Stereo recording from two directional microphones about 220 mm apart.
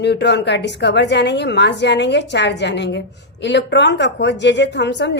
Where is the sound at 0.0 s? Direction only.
50° left (ahead or behind).